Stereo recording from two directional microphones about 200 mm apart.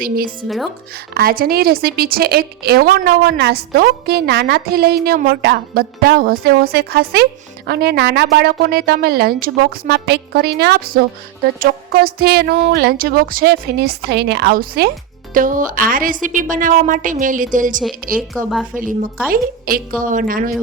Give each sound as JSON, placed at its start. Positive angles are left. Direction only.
{"t": 0.4, "sound": "speech", "side_deg": 0}
{"t": 1.1, "sound": "a woman's voice", "side_deg": -50}